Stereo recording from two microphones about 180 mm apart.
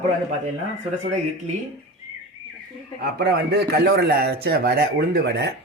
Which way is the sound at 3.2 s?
65° right (ahead or behind).